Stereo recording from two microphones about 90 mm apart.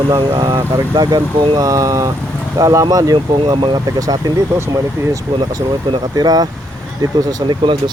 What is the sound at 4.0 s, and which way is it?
Speech, 45° right (ahead or behind).